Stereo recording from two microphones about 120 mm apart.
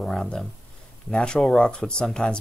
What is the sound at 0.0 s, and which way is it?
Speech, 5° left (ahead or behind).